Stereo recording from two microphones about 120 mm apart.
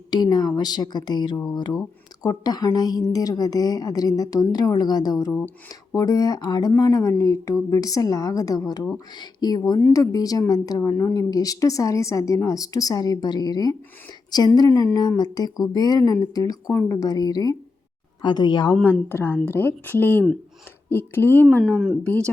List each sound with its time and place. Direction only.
0.1 s a woman's voice: 35° left (ahead or behind)
18.7 s speech: 15° left (ahead or behind)